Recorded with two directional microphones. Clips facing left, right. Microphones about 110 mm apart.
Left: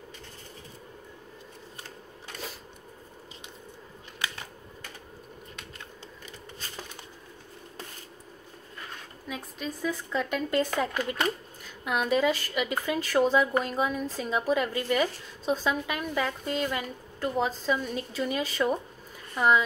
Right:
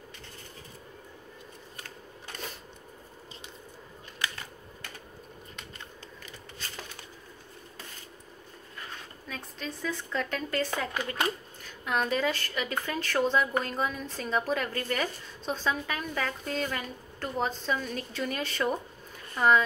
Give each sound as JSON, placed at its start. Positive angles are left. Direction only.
{"t": 9.3, "sound": "speech", "side_deg": 10}